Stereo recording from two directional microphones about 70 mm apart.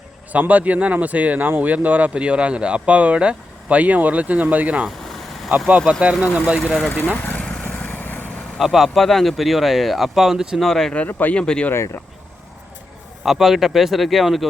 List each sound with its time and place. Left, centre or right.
0.3 s speech: right
6.7 s speech: centre
7.2 s vehicle: left
7.7 s lawn mower: left
8.5 s speech: centre
10.6 s speech: centre
11.1 s speech: left
11.4 s speech: centre
13.2 s speech: centre